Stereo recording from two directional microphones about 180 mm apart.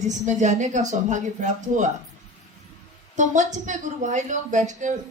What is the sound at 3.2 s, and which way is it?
A woman's voice, 45° right (ahead or behind).